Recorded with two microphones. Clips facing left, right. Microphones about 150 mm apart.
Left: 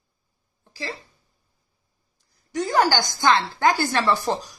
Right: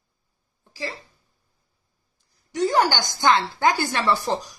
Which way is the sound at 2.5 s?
20° right (ahead or behind).